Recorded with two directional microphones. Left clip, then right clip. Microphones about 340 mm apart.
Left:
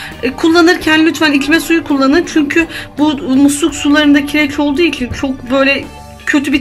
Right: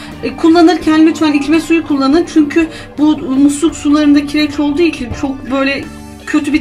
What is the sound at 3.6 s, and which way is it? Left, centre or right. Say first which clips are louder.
Speech: left 1 dB; left.